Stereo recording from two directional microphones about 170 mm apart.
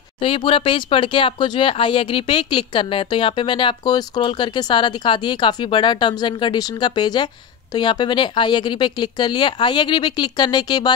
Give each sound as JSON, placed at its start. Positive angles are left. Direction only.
{"t": 0.2, "sound": "speech", "side_deg": 30}